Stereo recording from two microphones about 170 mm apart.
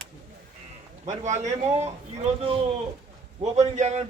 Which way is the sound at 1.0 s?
45° right (ahead or behind).